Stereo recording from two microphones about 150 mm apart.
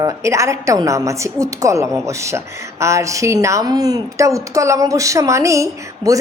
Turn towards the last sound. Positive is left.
turn(degrees=-20)  # may be behind; listen again after turning